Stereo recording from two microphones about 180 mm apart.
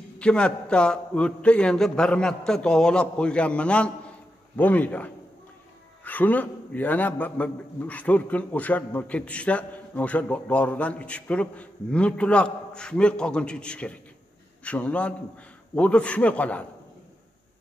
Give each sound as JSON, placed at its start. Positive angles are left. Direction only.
{"t": 0.2, "sound": "a man's voice", "side_deg": 5}